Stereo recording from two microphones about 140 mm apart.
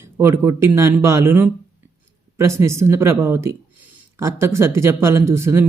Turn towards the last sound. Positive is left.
turn(degrees=-20)  # may be behind; listen again after turning